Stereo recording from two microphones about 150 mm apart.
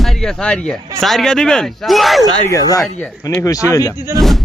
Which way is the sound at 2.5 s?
25° left (ahead or behind).